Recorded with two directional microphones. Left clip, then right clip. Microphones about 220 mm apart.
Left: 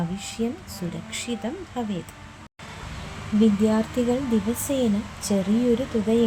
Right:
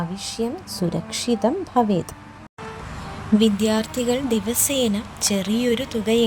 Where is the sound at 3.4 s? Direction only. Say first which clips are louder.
Even; 45° right (ahead or behind).